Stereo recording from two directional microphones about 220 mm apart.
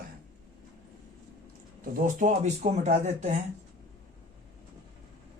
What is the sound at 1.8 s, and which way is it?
Speech, 35° right (ahead or behind).